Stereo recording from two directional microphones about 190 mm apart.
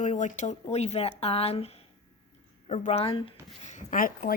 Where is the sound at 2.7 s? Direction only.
35° left (ahead or behind).